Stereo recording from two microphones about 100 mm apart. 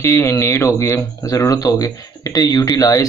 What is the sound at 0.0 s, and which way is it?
Speech, 30° left (ahead or behind).